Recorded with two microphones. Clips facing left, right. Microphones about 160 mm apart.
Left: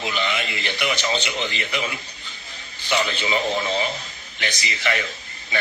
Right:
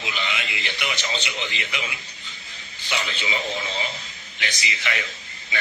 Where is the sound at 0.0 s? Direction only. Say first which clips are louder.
Left 5 dB; 50° left (ahead or behind).